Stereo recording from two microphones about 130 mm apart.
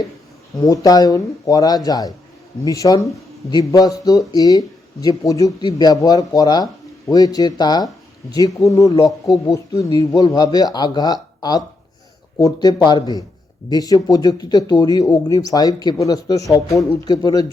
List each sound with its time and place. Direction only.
0.5 s speech: 25° left (ahead or behind)